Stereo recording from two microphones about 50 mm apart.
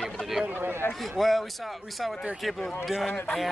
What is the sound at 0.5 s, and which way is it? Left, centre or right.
Speech, right.